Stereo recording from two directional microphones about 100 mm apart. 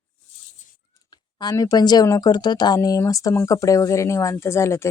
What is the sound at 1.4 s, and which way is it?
Speech, 35° left (ahead or behind).